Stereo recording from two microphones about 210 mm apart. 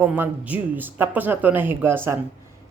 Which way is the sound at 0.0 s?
10° right (ahead or behind).